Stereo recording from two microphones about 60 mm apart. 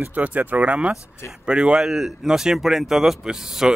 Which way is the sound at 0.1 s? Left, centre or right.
Right.